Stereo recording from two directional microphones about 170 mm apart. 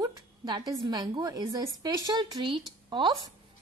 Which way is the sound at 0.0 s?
25° right (ahead or behind).